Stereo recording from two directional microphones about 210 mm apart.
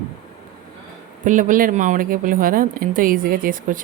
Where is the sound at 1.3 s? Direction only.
40° right (ahead or behind).